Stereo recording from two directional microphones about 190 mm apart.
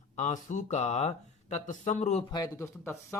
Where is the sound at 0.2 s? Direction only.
40° left (ahead or behind).